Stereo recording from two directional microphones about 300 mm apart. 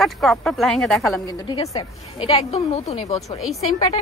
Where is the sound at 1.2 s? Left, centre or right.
Centre.